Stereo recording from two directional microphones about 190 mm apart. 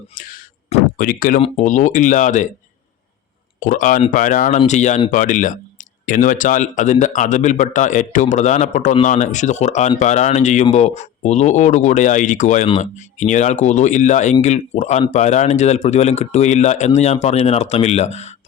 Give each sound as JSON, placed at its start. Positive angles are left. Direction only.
{"t": 0.1, "sound": "a sound", "side_deg": 45}
{"t": 1.4, "sound": "speech", "side_deg": 35}
{"t": 3.6, "sound": "speech", "side_deg": 45}